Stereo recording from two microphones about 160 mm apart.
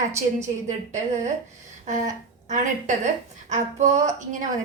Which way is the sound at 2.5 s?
50° right (ahead or behind).